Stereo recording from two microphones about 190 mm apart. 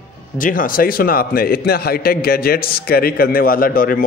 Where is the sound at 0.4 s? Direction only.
45° left (ahead or behind).